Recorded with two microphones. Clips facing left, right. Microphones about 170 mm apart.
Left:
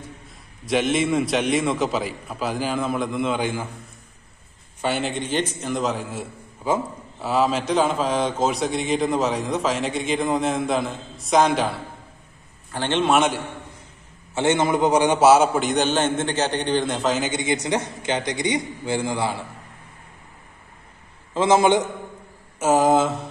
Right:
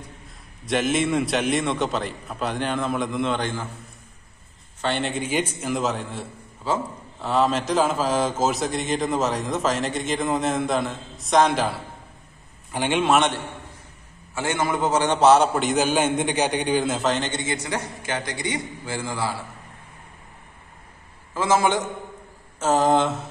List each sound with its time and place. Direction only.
0.7 s a man's voice: centre (ahead or behind)
4.8 s a man's voice: 5° left (ahead or behind)
12.7 s a man's voice: 10° right (ahead or behind)
13.0 s a man's voice: centre (ahead or behind)
14.3 s a man's voice: 20° left (ahead or behind)
21.3 s a man's voice: 20° left (ahead or behind); by 23.2 s centre (ahead or behind)